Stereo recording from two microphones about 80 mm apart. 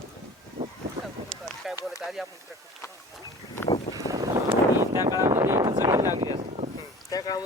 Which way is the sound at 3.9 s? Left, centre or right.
Right.